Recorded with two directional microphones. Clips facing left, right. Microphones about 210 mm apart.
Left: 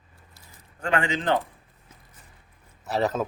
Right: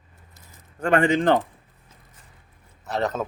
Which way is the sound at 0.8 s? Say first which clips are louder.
Right 7 dB; 50° right (ahead or behind).